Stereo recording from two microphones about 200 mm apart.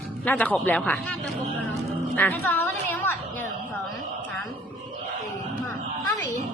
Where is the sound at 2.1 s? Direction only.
10° left (ahead or behind).